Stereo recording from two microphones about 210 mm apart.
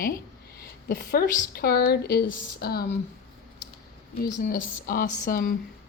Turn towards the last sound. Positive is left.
turn(degrees=40)  # may be behind; listen again after turning